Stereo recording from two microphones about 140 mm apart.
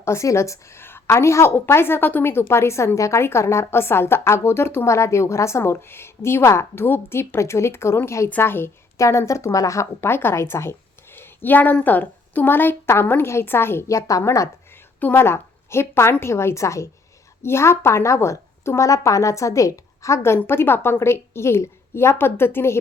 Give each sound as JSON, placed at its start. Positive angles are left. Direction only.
{"t": 0.0, "sound": "a woman's voice", "side_deg": 20}